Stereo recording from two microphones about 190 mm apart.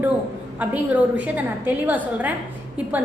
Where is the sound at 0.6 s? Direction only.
10° right (ahead or behind).